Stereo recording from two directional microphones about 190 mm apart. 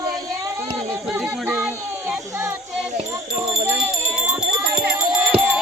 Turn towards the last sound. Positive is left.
turn(degrees=-5)  # may be behind; listen again after turning